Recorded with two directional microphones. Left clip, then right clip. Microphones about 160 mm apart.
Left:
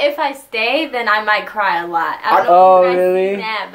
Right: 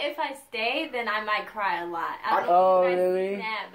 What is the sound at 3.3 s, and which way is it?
Speech, 35° left (ahead or behind).